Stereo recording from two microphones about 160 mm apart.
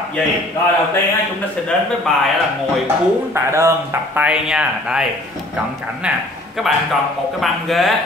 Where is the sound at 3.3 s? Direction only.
15° right (ahead or behind).